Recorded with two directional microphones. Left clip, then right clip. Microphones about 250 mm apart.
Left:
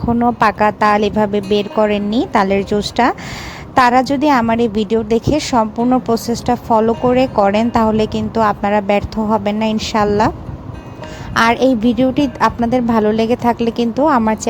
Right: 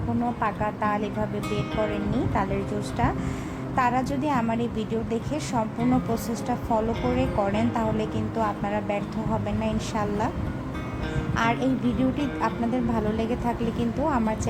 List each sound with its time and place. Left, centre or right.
0.3 s a woman's voice: left
11.3 s a woman's voice: left